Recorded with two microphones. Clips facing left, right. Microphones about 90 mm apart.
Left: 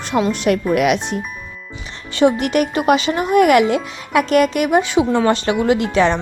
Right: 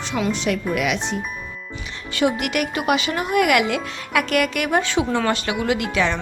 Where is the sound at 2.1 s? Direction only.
30° left (ahead or behind).